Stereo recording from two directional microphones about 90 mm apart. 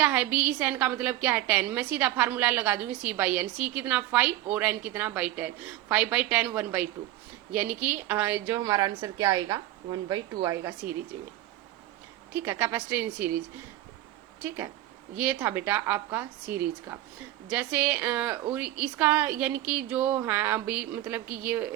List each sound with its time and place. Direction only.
0.0 s a woman's voice: 15° right (ahead or behind)
8.6 s a woman's voice: 45° right (ahead or behind)
12.3 s a woman's voice: 25° right (ahead or behind)
14.4 s a woman's voice: 25° right (ahead or behind)